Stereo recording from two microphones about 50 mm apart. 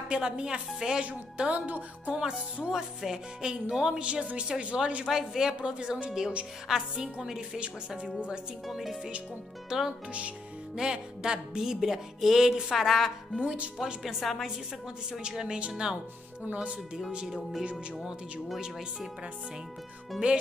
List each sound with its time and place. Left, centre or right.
0.1 s music: centre
1.0 s a woman's voice: right
2.7 s music: centre
4.0 s a woman's voice: right
5.0 s music: centre
8.6 s a woman's voice: centre
9.7 s music: centre
12.6 s a woman's voice: centre
13.4 s a woman's voice: right
14.0 s a woman's voice: centre
15.2 s music: centre
16.4 s a woman's voice: right